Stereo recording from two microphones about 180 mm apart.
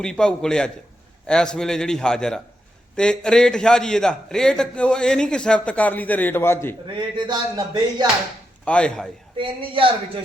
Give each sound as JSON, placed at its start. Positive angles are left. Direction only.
{"t": 0.0, "sound": "a man's voice", "side_deg": 5}
{"t": 6.8, "sound": "speech", "side_deg": -25}
{"t": 8.6, "sound": "a man's voice", "side_deg": 5}
{"t": 9.4, "sound": "speech", "side_deg": -30}